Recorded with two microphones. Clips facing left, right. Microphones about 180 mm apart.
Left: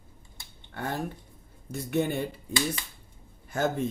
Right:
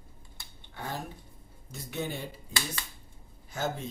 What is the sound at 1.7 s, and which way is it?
Speech, 55° left (ahead or behind).